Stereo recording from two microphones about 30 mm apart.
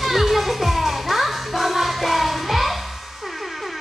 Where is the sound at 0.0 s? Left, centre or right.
Centre.